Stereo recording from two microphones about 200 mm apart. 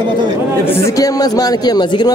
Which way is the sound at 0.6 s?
15° left (ahead or behind).